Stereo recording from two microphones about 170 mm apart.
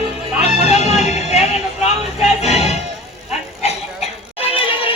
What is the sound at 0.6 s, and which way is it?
Music, 40° left (ahead or behind).